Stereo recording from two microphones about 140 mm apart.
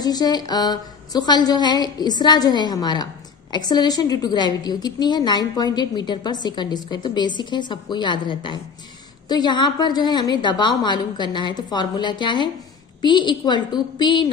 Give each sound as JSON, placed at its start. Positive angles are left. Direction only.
{"t": 0.0, "sound": "a woman's voice", "side_deg": 30}